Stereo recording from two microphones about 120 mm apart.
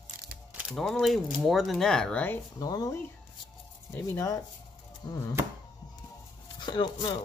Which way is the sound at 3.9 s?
25° left (ahead or behind).